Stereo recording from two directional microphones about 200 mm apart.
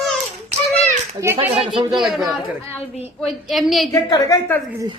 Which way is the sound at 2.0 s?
Centre (ahead or behind).